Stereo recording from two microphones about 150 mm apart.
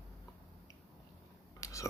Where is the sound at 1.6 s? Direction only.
20° left (ahead or behind).